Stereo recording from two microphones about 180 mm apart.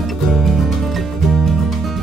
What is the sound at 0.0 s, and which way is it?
Music, centre (ahead or behind).